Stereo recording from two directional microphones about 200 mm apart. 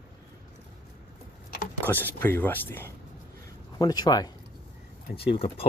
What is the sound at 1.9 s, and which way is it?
Speech, 10° left (ahead or behind).